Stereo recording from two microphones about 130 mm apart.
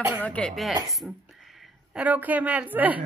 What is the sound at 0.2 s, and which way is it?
Speech, 10° left (ahead or behind).